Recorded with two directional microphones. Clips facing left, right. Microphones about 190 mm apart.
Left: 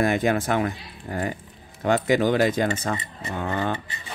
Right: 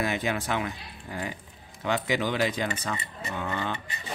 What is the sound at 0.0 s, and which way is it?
Speech, 50° left (ahead or behind).